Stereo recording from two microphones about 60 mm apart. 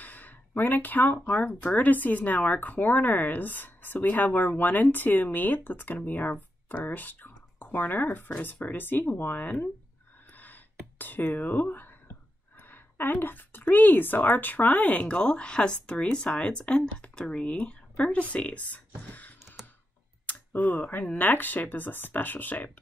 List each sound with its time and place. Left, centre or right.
0.0 s speech: left
10.3 s a sound: left
11.0 s a woman's voice: left